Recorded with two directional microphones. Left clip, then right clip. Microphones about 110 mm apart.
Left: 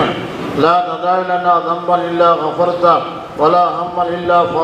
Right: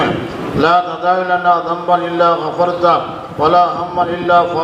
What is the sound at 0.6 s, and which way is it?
A man's voice, 40° right (ahead or behind).